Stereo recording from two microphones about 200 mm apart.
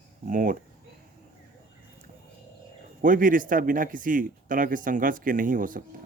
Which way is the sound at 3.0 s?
45° right (ahead or behind).